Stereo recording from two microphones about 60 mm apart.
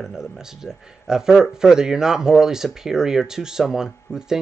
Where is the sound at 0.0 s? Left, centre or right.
Centre.